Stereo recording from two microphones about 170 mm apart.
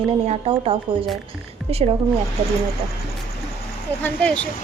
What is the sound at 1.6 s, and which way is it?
Speech, centre (ahead or behind).